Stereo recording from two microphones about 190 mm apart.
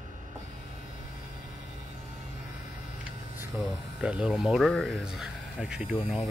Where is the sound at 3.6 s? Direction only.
5° right (ahead or behind).